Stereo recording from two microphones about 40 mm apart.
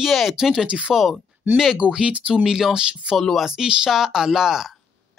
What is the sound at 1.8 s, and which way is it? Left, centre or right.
Speech, right.